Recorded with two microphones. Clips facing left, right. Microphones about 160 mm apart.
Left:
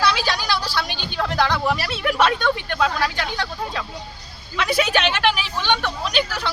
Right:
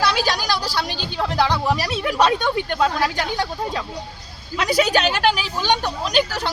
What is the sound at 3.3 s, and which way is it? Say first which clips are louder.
Speech: right 3 dB; 20° right (ahead or behind).